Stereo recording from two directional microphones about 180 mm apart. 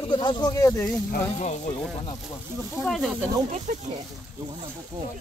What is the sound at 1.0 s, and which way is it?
Speech, 40° left (ahead or behind).